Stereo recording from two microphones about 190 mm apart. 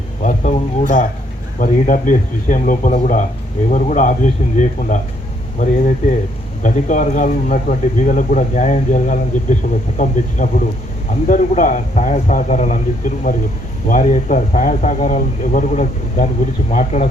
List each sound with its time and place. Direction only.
0.2 s speech: 40° left (ahead or behind)
13.3 s speech: 50° left (ahead or behind)